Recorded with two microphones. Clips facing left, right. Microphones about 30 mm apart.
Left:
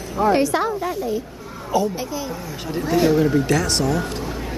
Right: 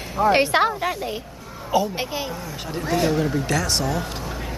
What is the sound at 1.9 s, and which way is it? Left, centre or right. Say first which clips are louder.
Speech: even; right.